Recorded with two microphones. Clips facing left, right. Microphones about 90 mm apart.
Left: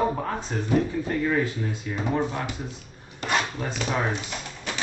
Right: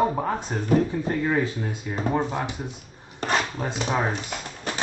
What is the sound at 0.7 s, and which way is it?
Speech, 35° right (ahead or behind).